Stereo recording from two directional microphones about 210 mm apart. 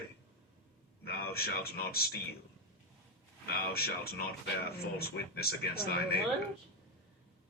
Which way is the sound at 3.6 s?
45° left (ahead or behind).